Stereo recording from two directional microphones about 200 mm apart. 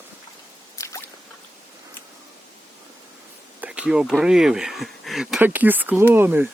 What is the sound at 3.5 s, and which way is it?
Speech, 5° right (ahead or behind).